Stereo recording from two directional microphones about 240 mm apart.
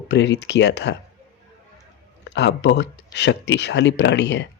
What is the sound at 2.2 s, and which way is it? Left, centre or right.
Speech, left.